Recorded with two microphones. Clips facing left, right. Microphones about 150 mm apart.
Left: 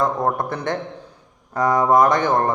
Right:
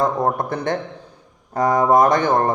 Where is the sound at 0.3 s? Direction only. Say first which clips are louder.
Right 1 dB; 40° right (ahead or behind).